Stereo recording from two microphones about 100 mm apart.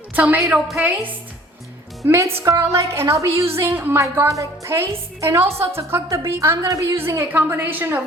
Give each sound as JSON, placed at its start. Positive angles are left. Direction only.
{"t": 0.1, "sound": "a woman's voice", "side_deg": -15}
{"t": 0.4, "sound": "a woman's voice", "side_deg": -5}
{"t": 2.0, "sound": "a woman's voice", "side_deg": -25}